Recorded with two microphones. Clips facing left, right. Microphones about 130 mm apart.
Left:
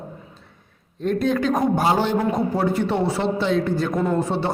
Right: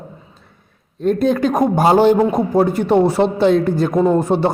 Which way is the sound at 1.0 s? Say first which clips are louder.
Right 5 dB; 40° right (ahead or behind).